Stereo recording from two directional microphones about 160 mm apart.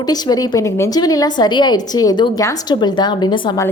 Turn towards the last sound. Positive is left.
turn(degrees=25)  # may be behind; listen again after turning